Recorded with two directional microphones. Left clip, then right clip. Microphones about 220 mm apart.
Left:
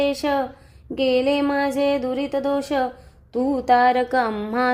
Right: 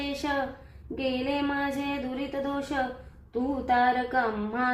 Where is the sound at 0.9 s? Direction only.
45° left (ahead or behind).